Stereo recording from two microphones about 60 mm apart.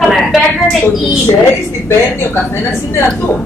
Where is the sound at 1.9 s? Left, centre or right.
Left.